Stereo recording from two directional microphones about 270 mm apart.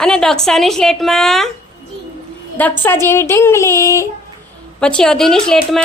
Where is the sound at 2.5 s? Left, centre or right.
Centre.